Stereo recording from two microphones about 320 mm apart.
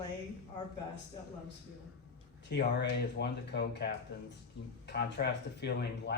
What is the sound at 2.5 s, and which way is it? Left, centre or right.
Speech, left.